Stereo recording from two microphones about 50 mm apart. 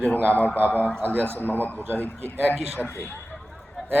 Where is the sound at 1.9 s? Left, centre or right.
Right.